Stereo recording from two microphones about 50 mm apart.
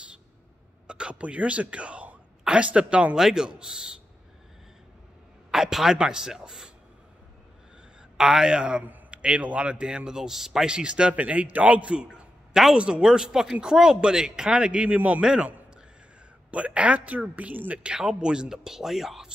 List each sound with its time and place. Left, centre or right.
0.8 s speech: centre
3.2 s speech: centre
5.5 s a man's voice: centre
8.2 s a man's voice: centre; by 17.9 s right
17.9 s speech: centre